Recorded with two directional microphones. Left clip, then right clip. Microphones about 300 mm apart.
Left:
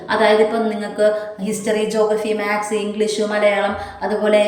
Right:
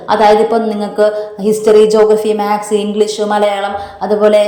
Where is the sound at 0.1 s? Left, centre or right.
Centre.